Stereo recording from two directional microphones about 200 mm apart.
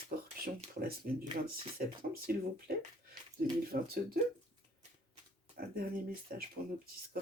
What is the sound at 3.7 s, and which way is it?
Speech, 45° right (ahead or behind).